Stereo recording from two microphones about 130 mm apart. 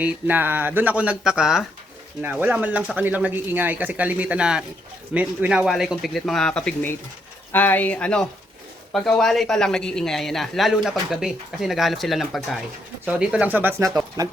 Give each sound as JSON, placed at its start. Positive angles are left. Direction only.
{"t": 0.0, "sound": "speech", "side_deg": -15}
{"t": 13.8, "sound": "speech", "side_deg": -25}